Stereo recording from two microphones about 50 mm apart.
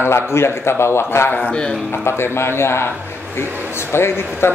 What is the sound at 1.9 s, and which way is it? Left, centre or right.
A man's voice, left.